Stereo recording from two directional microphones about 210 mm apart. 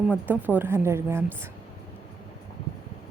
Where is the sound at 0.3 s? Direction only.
10° right (ahead or behind).